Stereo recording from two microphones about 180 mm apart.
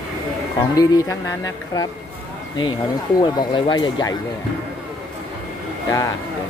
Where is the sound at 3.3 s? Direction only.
25° left (ahead or behind).